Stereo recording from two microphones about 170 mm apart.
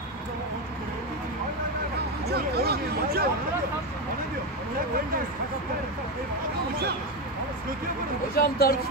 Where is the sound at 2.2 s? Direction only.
70° right (ahead or behind).